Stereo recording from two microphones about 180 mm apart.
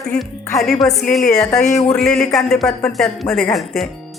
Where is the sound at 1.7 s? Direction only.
20° left (ahead or behind).